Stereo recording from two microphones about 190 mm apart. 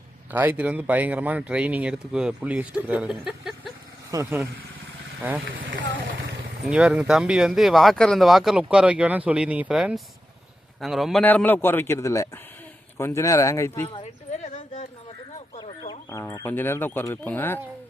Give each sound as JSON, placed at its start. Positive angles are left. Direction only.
{"t": 0.3, "sound": "speech", "side_deg": -10}
{"t": 5.5, "sound": "speech", "side_deg": -75}
{"t": 6.1, "sound": "a sound", "side_deg": -55}
{"t": 6.7, "sound": "speech", "side_deg": -5}
{"t": 13.8, "sound": "a sound", "side_deg": 35}
{"t": 15.8, "sound": "speech", "side_deg": 20}